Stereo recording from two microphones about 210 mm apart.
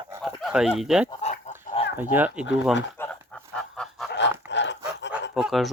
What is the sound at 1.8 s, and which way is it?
Fowl, 30° left (ahead or behind).